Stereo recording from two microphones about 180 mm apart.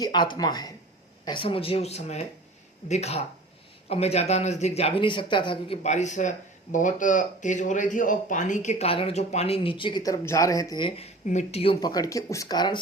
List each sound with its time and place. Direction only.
0.0 s speech: 25° left (ahead or behind)